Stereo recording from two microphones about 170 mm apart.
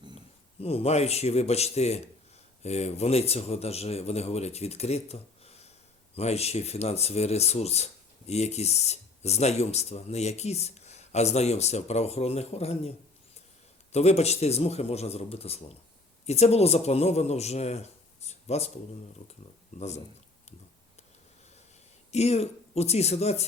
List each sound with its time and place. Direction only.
0.6 s speech: 35° left (ahead or behind)
13.9 s speech: 40° left (ahead or behind)
19.7 s speech: 40° left (ahead or behind)
22.1 s speech: 40° left (ahead or behind)